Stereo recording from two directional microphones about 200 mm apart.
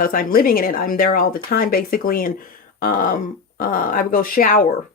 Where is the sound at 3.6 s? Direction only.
45° left (ahead or behind).